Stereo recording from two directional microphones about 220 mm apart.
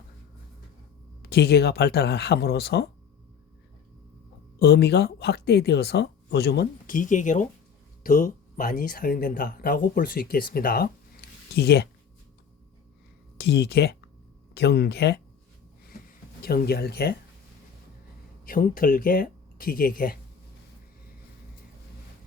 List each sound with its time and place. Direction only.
1.2 s speech: 45° left (ahead or behind)
4.6 s speech: 50° left (ahead or behind)
13.4 s speech: 50° left (ahead or behind)
16.4 s speech: 45° left (ahead or behind)
18.4 s speech: 40° left (ahead or behind)